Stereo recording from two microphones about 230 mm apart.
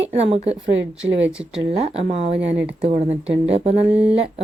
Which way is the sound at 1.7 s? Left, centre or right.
Right.